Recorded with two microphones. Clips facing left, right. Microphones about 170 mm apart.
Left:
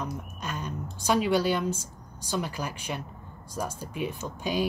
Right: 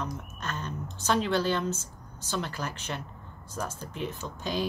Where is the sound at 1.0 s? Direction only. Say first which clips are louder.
Left 2 dB; 10° left (ahead or behind).